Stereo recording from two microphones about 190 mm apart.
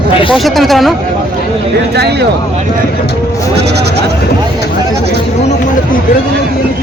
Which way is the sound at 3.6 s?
60° right (ahead or behind).